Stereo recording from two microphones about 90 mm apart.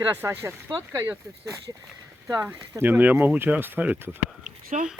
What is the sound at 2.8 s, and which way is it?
Speech, 20° right (ahead or behind).